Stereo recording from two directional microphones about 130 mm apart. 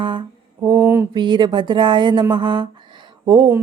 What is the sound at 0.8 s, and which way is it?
Mantra, 15° right (ahead or behind).